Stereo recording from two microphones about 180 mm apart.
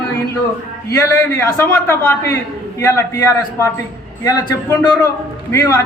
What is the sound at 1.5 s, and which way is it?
A man's voice, 10° left (ahead or behind).